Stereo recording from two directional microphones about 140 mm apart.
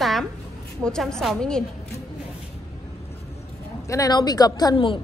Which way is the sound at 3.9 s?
25° left (ahead or behind).